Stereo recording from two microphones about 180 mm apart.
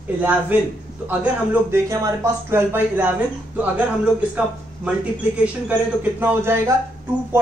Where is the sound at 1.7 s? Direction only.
15° right (ahead or behind).